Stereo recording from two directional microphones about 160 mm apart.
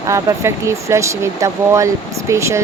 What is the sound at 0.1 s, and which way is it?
Speech, 20° right (ahead or behind).